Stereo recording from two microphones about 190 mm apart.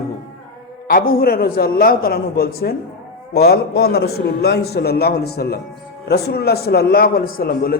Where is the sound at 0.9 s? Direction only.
50° left (ahead or behind).